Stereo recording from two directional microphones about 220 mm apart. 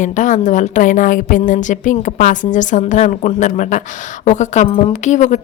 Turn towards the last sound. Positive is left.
turn(degrees=35)  # may be behind; listen again after turning